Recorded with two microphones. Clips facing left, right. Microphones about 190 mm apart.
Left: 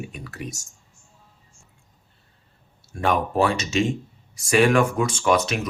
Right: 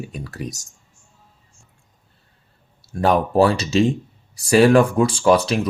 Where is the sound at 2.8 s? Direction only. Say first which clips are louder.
Right 5 dB; 35° right (ahead or behind).